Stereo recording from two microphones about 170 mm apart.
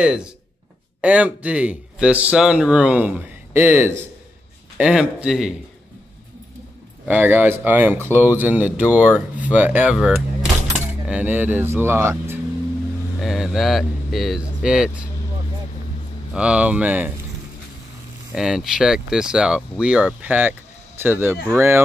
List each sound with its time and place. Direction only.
1.0 s speech: 5° right (ahead or behind)
7.1 s speech: 10° right (ahead or behind)
13.2 s speech: centre (ahead or behind)
16.3 s speech: 5° right (ahead or behind)
18.3 s speech: 5° right (ahead or behind)